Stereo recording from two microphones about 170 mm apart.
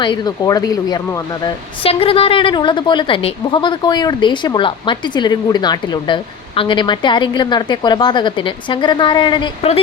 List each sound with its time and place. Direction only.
0.0 s speech: 25° left (ahead or behind)